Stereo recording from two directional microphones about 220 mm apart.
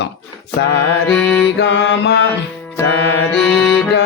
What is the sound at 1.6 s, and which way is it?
Speech, 55° left (ahead or behind).